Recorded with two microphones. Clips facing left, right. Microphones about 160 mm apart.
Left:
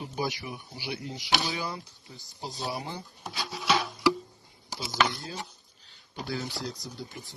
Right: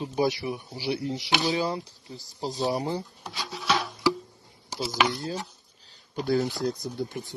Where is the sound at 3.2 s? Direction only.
Centre (ahead or behind).